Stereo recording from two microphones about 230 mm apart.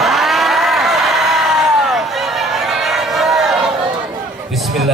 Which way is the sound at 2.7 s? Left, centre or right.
Centre.